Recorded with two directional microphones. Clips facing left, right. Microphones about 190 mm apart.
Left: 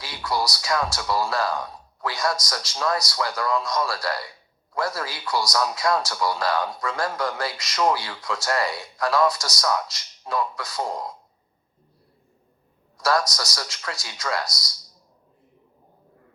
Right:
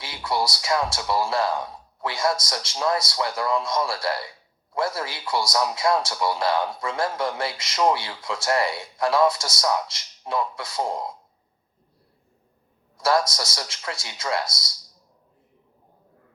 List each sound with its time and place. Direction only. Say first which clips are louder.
0.0 s a man's voice: right 1 dB; 25° right (ahead or behind)
13.0 s a man's voice: right 1 dB; 25° right (ahead or behind)